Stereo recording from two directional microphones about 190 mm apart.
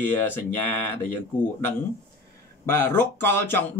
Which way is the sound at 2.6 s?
10° left (ahead or behind).